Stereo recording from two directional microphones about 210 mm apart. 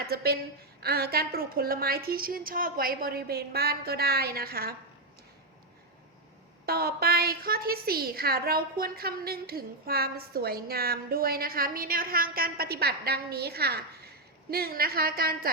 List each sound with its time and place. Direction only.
0.1 s a woman's voice: 45° right (ahead or behind)
6.7 s a woman's voice: 45° right (ahead or behind)